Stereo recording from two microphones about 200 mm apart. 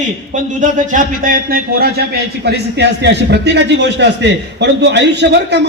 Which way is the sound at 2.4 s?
60° right (ahead or behind).